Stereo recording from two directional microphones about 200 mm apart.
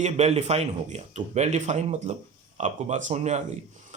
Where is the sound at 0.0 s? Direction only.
35° right (ahead or behind).